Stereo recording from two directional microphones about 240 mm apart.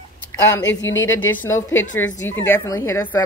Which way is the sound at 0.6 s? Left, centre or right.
Left.